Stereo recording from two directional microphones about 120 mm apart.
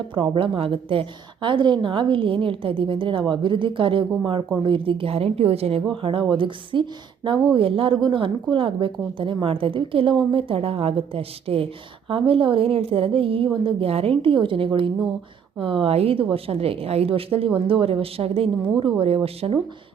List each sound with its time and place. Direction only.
0.1 s a woman's voice: 45° right (ahead or behind)